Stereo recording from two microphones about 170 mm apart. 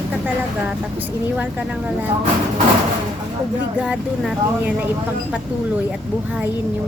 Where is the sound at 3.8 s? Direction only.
5° right (ahead or behind).